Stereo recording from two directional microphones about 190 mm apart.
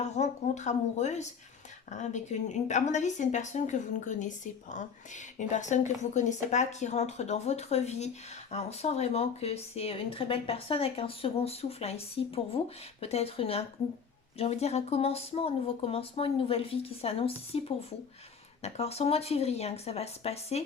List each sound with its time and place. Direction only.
0.0 s speech: 35° left (ahead or behind)